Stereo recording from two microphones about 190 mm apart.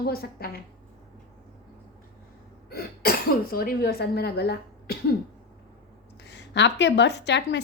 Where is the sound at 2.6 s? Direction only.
50° left (ahead or behind).